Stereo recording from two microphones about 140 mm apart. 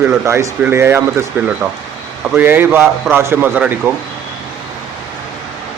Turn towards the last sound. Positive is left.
turn(degrees=-10)  # may be behind; listen again after turning